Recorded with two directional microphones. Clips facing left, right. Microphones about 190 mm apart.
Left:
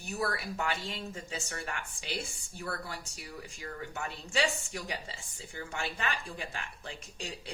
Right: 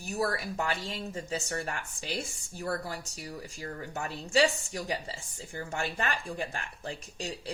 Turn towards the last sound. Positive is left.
turn(degrees=-40)  # may be behind; listen again after turning